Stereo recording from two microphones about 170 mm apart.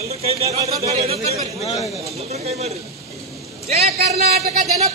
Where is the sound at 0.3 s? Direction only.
35° right (ahead or behind).